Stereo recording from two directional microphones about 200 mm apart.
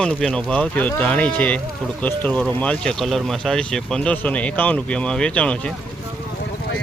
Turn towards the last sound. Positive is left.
turn(degrees=5)  # may be behind; listen again after turning